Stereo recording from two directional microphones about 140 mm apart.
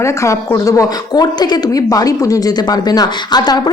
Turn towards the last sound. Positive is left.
turn(degrees=30)  # may be behind; listen again after turning